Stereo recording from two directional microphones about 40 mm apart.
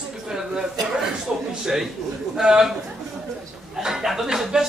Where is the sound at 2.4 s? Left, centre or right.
Centre.